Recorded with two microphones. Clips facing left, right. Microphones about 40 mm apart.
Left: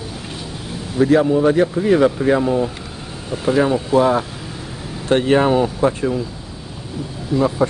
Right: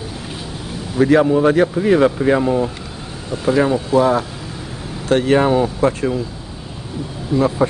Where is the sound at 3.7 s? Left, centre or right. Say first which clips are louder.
Even; centre.